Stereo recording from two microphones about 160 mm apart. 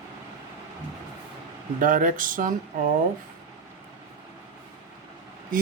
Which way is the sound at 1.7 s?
55° right (ahead or behind).